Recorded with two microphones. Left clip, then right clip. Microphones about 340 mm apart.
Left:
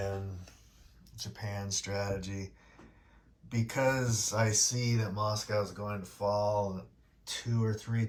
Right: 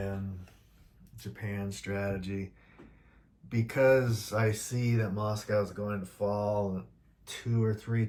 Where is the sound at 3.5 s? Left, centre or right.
Centre.